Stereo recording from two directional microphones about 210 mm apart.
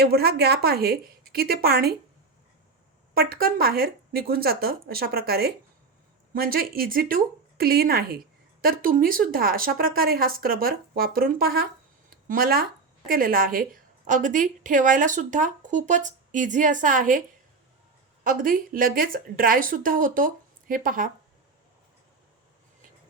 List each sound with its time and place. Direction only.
0.0 s speech: 50° right (ahead or behind)
3.2 s speech: 45° right (ahead or behind)